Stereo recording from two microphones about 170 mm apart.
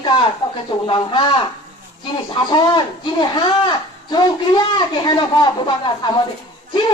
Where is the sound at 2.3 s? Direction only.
25° left (ahead or behind).